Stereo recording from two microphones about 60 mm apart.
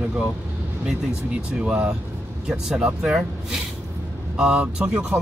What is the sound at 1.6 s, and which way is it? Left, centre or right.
Speech, centre.